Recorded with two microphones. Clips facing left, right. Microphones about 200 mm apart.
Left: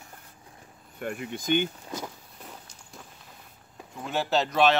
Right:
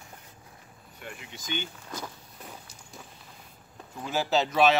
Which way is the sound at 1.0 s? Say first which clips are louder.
Left 11 dB; 50° left (ahead or behind).